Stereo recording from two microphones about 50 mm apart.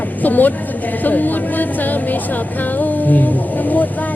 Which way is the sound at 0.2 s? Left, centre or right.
Left.